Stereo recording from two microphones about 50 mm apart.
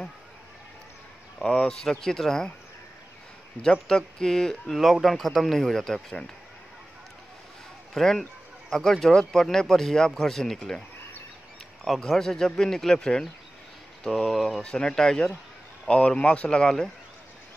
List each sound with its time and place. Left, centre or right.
1.4 s speech: centre
3.8 s speech: centre
7.9 s speech: centre
12.0 s speech: centre
14.6 s speech: centre